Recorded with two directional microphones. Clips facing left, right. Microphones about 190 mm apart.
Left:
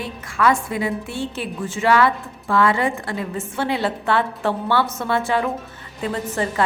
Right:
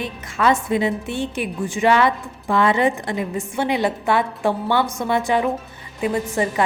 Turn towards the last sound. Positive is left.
turn(degrees=-15)  # may be behind; listen again after turning